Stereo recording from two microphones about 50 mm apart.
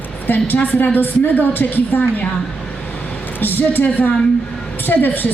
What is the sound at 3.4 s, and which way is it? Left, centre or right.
Speech, left.